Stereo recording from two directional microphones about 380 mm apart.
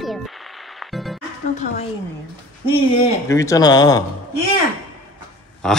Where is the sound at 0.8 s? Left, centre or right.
Centre.